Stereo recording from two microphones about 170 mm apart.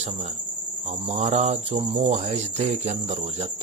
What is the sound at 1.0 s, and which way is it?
Cricket, 40° right (ahead or behind).